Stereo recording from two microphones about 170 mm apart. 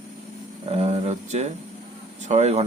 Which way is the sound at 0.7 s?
40° right (ahead or behind).